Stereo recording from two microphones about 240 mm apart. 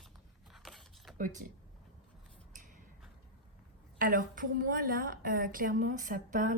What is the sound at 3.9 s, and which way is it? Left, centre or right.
Speech, right.